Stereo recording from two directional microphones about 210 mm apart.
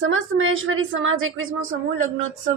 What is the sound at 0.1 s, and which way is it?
A woman's voice, 70° right (ahead or behind).